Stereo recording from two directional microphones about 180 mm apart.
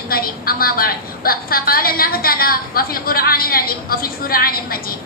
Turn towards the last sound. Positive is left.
turn(degrees=55)  # may be behind; listen again after turning